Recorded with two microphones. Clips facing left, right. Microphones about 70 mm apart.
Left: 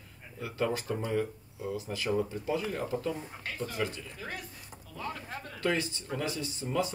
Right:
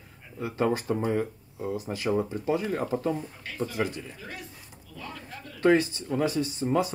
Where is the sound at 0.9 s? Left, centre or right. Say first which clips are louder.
Right 4 dB; right.